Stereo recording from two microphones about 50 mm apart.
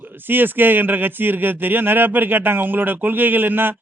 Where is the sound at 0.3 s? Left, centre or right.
Right.